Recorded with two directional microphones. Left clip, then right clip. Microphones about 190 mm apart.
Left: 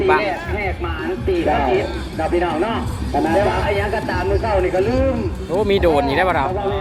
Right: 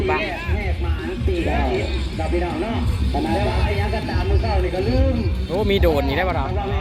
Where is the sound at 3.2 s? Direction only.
25° left (ahead or behind).